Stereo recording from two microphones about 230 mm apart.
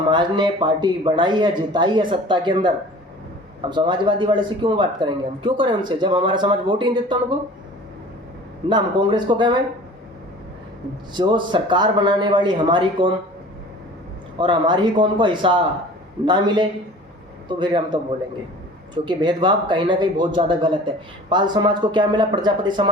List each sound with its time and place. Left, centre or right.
0.1 s speech: centre
3.6 s speech: centre
8.7 s speech: centre
11.1 s speech: centre
14.3 s speech: centre
19.0 s speech: centre